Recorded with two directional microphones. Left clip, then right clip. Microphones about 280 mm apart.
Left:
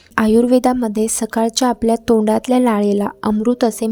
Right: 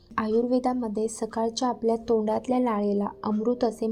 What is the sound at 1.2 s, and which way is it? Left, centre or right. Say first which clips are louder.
Speech: left 10 dB; left.